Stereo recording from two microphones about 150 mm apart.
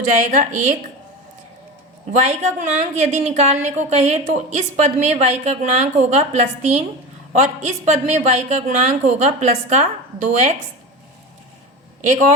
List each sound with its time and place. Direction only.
0.3 s a woman's voice: 55° right (ahead or behind)
2.0 s a woman's voice: 50° right (ahead or behind)